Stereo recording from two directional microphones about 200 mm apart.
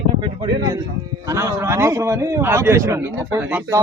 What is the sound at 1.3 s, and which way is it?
A man's voice, 15° right (ahead or behind).